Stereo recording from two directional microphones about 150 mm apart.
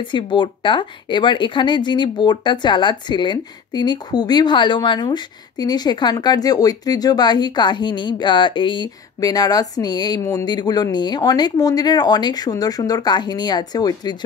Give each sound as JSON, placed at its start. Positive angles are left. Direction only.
{"t": 0.0, "sound": "speech", "side_deg": 30}